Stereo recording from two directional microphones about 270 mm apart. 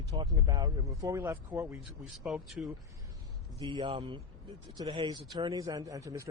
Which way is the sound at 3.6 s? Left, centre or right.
Centre.